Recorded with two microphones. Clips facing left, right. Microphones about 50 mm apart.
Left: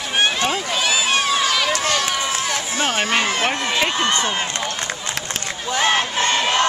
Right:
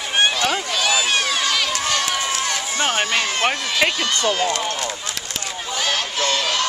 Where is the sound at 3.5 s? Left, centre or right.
Left.